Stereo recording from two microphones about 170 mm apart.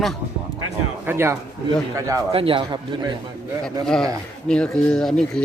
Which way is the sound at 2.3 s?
30° right (ahead or behind).